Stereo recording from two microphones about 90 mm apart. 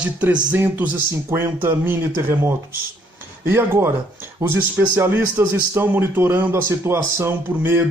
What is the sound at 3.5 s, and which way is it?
A man's voice, 25° right (ahead or behind).